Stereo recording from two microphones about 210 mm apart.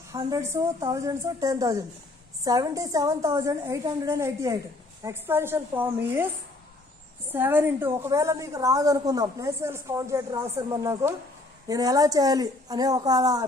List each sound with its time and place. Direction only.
0.1 s a woman's voice: 15° right (ahead or behind)
7.3 s a woman's voice: 10° right (ahead or behind)